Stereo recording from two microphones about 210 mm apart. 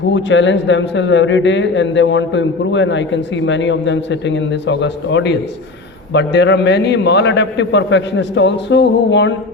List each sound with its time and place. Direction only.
0.1 s a man's voice: 60° left (ahead or behind)